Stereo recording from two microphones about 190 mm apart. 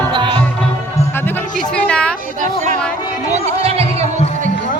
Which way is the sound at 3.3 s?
30° right (ahead or behind).